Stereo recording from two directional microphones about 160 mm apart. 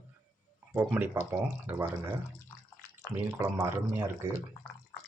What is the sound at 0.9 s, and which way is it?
Speech, 15° right (ahead or behind).